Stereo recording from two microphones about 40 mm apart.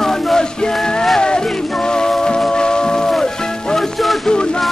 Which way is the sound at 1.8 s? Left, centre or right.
Centre.